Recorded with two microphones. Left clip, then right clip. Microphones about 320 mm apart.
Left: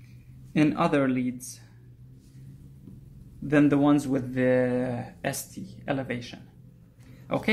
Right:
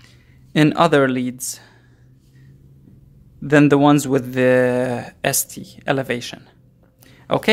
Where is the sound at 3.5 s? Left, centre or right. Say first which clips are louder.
Right 9 dB; right.